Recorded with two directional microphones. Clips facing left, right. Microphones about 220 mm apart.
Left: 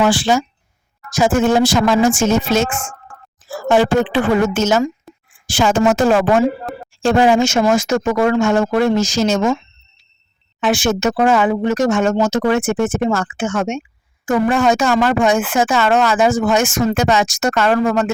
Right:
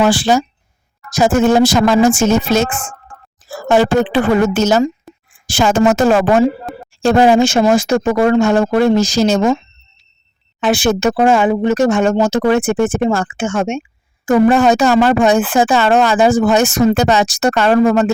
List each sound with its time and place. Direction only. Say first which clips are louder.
0.0 s a woman's voice: right 2 dB; 40° right (ahead or behind)
10.6 s speech: right 2 dB; 35° right (ahead or behind)